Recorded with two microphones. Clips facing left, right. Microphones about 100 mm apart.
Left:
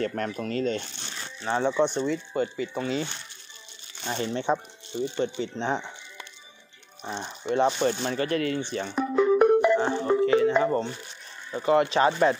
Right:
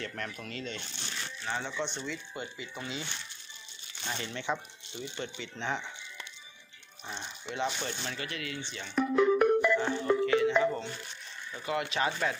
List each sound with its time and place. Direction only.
0.0 s speech: 40° left (ahead or behind)
4.1 s speech: 35° left (ahead or behind)
7.1 s speech: 45° left (ahead or behind)
8.9 s speech: 20° left (ahead or behind); by 12.4 s 40° left (ahead or behind)